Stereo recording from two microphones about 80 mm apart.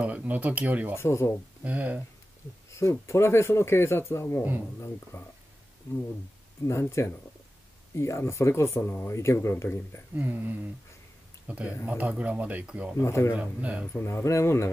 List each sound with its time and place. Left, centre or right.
0.0 s speech: centre
0.9 s speech: left
1.6 s speech: centre
2.7 s speech: left
6.6 s speech: left
10.1 s speech: right
13.0 s speech: left
13.4 s speech: centre
14.0 s speech: left